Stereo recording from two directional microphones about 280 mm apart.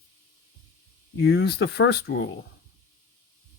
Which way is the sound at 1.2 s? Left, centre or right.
Left.